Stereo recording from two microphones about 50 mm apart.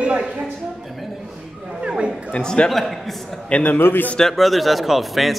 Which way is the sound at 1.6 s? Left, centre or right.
Right.